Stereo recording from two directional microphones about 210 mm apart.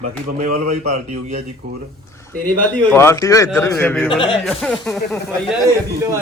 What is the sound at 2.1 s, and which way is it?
Speech, 10° left (ahead or behind).